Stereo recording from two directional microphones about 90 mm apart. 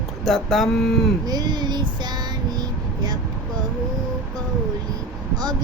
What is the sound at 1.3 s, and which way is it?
Child singing, 50° right (ahead or behind).